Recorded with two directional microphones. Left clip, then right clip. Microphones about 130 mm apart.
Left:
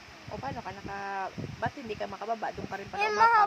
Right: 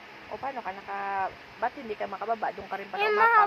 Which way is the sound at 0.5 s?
45° left (ahead or behind).